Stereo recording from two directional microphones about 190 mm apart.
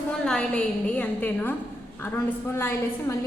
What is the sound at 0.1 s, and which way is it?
A woman's voice, 5° left (ahead or behind).